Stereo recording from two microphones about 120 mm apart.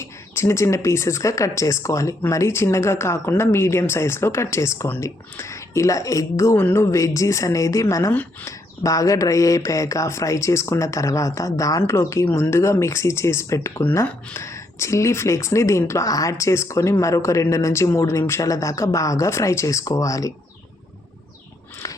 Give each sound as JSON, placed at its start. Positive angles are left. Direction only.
{"t": 0.0, "sound": "speech", "side_deg": 25}